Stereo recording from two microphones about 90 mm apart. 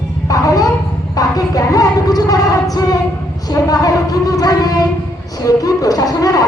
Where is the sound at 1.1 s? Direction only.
40° left (ahead or behind).